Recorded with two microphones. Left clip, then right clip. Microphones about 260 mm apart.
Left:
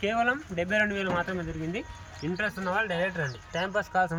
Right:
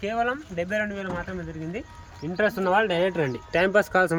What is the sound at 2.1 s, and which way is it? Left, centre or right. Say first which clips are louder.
Speech: right 7 dB; right.